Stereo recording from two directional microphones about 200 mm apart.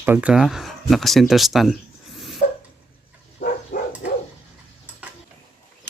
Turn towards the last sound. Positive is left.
turn(degrees=45)  # may be behind; listen again after turning